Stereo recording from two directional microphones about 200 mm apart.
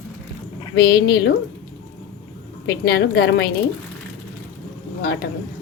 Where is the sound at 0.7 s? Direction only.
60° left (ahead or behind).